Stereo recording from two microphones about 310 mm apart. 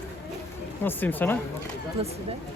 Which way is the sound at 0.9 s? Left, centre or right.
Centre.